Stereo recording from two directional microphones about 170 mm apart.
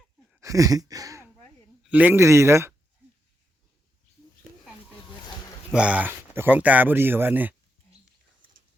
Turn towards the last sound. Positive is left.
turn(degrees=-10)  # may be behind; listen again after turning